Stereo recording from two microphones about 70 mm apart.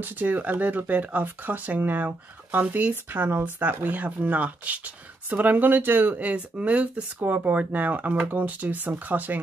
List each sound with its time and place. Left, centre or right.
0.0 s speech: right